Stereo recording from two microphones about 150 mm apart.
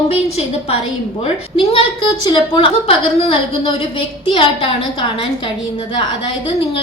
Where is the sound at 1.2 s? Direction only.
35° left (ahead or behind).